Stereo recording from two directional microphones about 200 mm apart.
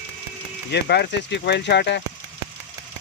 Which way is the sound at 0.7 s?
55° left (ahead or behind).